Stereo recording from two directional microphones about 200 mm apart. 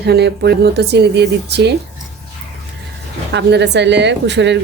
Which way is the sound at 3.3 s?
60° right (ahead or behind).